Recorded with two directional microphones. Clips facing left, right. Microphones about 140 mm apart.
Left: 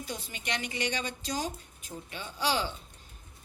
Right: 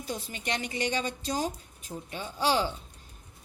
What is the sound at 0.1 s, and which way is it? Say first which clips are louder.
A woman's voice: right 4 dB; 45° right (ahead or behind).